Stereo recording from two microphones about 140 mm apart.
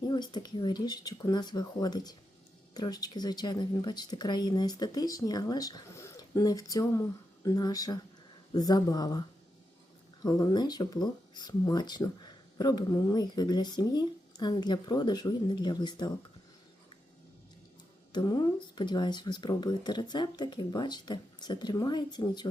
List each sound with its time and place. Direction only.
0.1 s speech: 30° left (ahead or behind)
10.2 s speech: 25° left (ahead or behind)
18.1 s speech: 30° left (ahead or behind)